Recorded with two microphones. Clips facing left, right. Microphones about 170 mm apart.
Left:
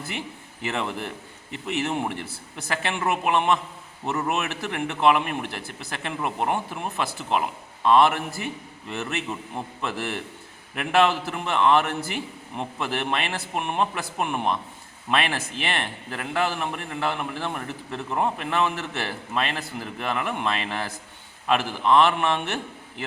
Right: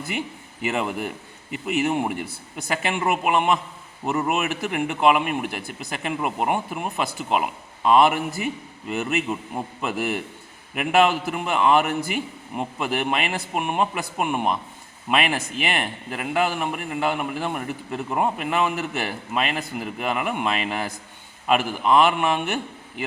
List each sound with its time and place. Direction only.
0.6 s a man's voice: 10° right (ahead or behind)